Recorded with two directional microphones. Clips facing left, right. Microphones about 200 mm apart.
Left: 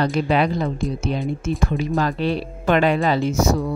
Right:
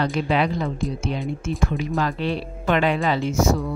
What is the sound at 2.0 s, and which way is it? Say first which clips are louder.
Speech: left 2 dB; 40° left (ahead or behind).